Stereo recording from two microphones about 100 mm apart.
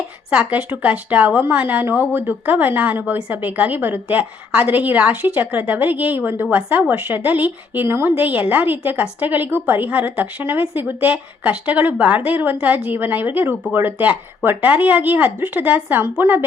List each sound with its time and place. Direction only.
0.3 s a woman's voice: 15° right (ahead or behind)